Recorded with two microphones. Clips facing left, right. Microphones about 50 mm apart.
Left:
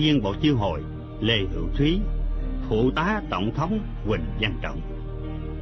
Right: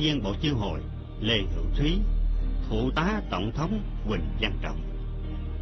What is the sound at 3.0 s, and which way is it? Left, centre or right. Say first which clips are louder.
Speech: left 4 dB; left.